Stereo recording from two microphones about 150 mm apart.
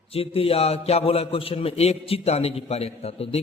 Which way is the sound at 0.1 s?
40° left (ahead or behind).